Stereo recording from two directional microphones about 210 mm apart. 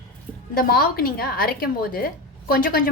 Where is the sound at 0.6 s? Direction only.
45° left (ahead or behind).